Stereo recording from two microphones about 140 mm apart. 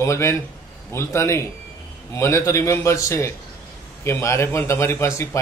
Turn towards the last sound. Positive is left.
turn(degrees=20)  # may be behind; listen again after turning